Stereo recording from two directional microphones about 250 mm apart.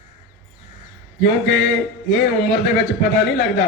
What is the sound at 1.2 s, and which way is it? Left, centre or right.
A man's voice, left.